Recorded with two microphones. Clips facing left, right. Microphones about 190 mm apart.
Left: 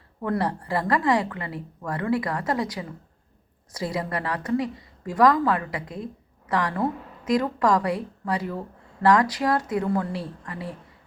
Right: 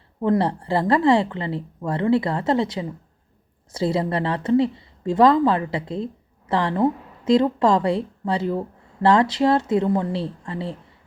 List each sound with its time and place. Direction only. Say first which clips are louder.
0.2 s a woman's voice: right 6 dB; 25° right (ahead or behind)